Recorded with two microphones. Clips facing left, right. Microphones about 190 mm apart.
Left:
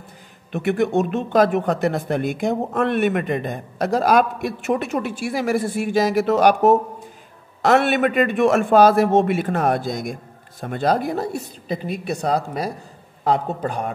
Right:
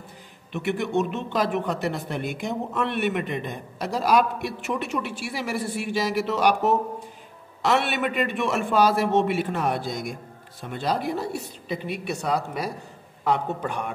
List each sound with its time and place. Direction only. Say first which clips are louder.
0.5 s a woman's voice: left 6 dB; 50° left (ahead or behind)